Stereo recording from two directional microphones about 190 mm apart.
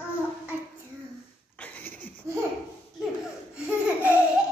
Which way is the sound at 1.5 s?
10° left (ahead or behind).